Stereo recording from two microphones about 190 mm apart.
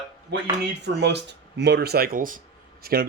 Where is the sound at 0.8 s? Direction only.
65° right (ahead or behind).